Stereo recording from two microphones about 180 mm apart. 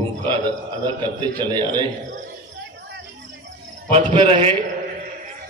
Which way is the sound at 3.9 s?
30° right (ahead or behind).